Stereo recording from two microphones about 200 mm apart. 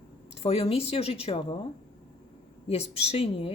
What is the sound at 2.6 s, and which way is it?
Speech, 30° left (ahead or behind).